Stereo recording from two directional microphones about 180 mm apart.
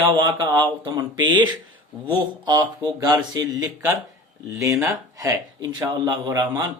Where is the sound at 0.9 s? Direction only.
25° right (ahead or behind).